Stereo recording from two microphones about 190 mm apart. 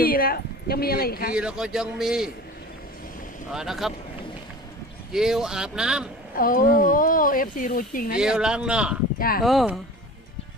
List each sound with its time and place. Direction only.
0.0 s speech: 50° left (ahead or behind)
1.3 s a man's voice: 5° right (ahead or behind)
3.5 s a man's voice: centre (ahead or behind)
5.1 s a man's voice: centre (ahead or behind)
6.3 s speech: 45° left (ahead or behind)
8.2 s a man's voice: 5° right (ahead or behind)
9.1 s speech: 50° left (ahead or behind)
9.4 s a man's voice: centre (ahead or behind)